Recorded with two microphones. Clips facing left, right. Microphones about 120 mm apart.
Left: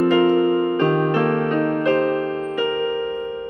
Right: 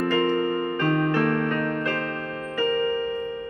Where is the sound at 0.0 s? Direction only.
15° left (ahead or behind).